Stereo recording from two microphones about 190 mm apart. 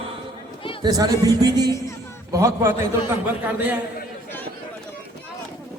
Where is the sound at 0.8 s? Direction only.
20° right (ahead or behind).